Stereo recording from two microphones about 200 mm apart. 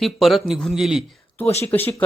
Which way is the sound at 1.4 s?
30° left (ahead or behind).